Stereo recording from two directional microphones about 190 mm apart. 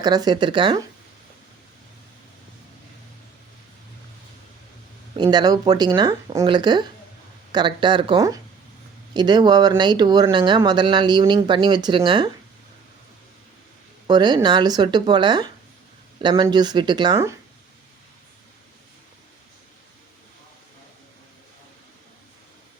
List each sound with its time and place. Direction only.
0.0 s speech: 20° right (ahead or behind)
5.1 s speech: 25° right (ahead or behind)
14.1 s speech: 25° right (ahead or behind)